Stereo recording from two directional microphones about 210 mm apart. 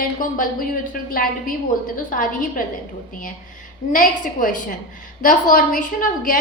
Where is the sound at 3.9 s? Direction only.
40° left (ahead or behind).